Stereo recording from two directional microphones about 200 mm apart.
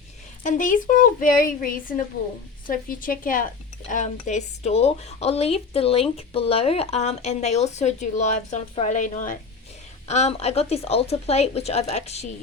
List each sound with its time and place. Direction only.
0.4 s a woman's voice: 40° left (ahead or behind)